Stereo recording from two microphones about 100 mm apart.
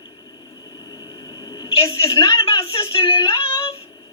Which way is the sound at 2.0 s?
35° left (ahead or behind).